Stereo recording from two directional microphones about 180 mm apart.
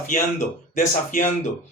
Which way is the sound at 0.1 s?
45° left (ahead or behind).